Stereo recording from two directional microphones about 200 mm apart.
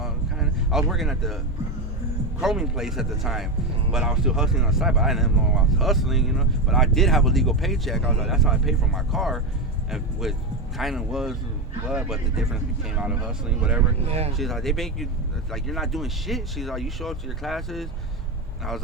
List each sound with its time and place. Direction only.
0.0 s a sound: centre (ahead or behind)
2.4 s speech: 5° right (ahead or behind)
14.0 s speech: 30° right (ahead or behind)
14.3 s speech: centre (ahead or behind)